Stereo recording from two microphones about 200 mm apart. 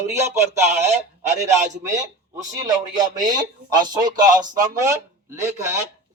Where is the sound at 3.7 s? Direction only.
20° right (ahead or behind).